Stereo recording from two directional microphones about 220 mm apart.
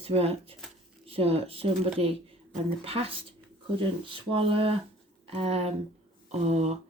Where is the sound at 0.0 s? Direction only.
25° right (ahead or behind).